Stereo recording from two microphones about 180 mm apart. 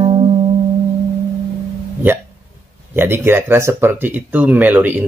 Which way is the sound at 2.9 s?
10° right (ahead or behind).